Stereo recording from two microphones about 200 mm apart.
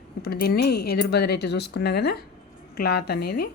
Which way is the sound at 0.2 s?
50° left (ahead or behind).